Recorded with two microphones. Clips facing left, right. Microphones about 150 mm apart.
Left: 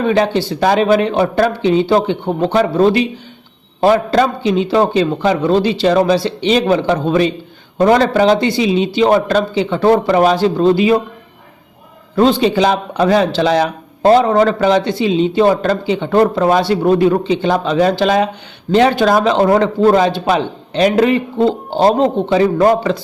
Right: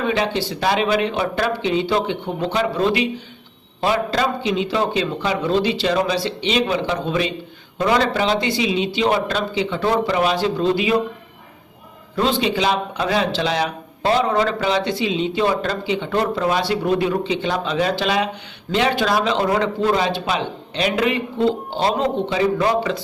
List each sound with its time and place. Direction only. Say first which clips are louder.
0.0 s a man's voice: left 7 dB; 40° left (ahead or behind)
12.1 s a man's voice: left 8 dB; 45° left (ahead or behind)